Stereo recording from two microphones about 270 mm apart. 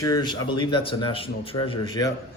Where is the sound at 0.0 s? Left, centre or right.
Centre.